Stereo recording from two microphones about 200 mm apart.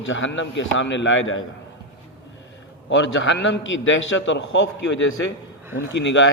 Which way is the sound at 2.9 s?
65° left (ahead or behind).